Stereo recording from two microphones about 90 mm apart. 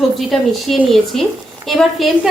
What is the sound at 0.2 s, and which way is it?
A woman's voice, centre (ahead or behind).